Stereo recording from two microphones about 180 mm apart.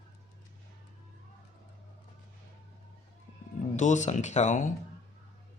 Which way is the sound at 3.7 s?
40° left (ahead or behind).